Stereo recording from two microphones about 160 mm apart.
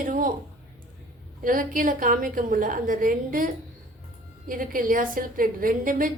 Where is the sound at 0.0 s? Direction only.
60° right (ahead or behind).